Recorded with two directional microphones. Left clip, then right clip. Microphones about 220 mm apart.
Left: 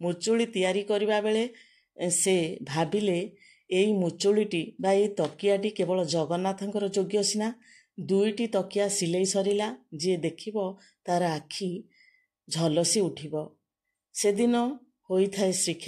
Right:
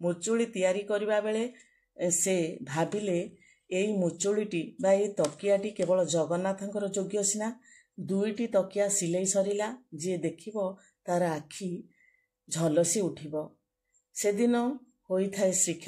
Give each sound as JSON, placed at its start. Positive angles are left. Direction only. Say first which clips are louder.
{"t": 0.0, "sound": "speech", "louder": "left 2 dB", "side_deg": 30}